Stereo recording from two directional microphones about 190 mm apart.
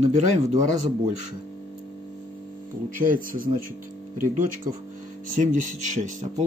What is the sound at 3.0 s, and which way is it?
Speech, 45° right (ahead or behind).